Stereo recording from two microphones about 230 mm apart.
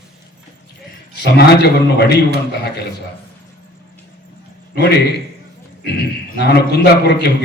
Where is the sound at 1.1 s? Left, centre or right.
Left.